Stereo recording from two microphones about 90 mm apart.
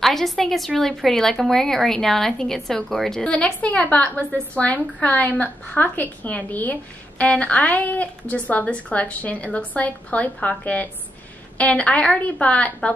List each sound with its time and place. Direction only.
0.0 s a woman's voice: centre (ahead or behind)